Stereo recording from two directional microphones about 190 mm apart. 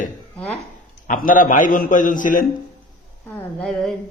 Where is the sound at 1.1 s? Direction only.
45° left (ahead or behind).